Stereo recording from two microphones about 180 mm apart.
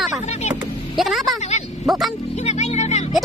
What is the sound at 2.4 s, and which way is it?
Speech, 40° left (ahead or behind).